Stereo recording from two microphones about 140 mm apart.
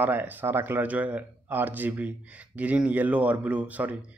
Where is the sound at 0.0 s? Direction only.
15° right (ahead or behind).